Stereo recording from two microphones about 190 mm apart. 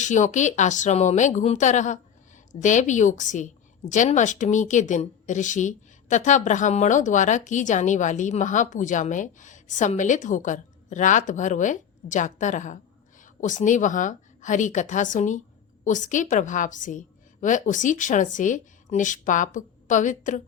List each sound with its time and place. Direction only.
0.0 s a woman's voice: 40° left (ahead or behind)